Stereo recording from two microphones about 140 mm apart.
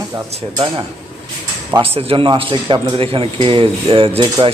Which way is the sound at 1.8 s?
45° right (ahead or behind).